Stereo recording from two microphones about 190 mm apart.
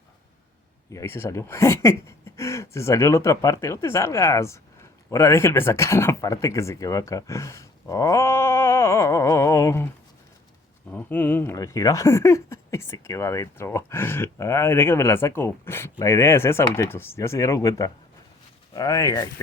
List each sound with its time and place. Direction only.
0.9 s speech: 15° left (ahead or behind)
10.9 s speech: 10° left (ahead or behind)